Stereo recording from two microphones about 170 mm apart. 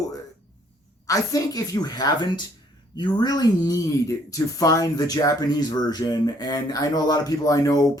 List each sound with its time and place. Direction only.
1.0 s speech: 20° left (ahead or behind)